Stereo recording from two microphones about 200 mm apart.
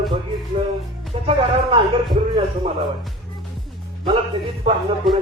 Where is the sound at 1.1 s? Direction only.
30° right (ahead or behind).